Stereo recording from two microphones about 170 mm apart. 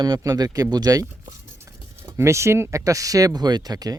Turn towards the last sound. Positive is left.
turn(degrees=-20)  # may be behind; listen again after turning